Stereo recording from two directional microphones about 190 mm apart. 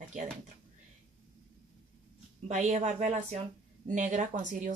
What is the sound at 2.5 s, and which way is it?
Speech, 40° right (ahead or behind).